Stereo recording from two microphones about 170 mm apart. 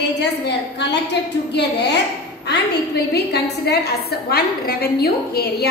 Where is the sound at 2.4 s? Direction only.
75° left (ahead or behind).